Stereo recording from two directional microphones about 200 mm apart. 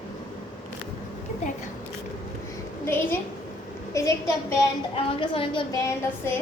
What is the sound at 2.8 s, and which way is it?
A child's voice, 10° left (ahead or behind).